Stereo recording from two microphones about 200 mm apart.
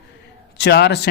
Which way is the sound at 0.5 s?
55° left (ahead or behind).